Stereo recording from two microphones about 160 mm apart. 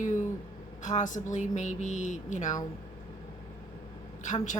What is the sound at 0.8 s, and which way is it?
A woman's voice, 50° left (ahead or behind).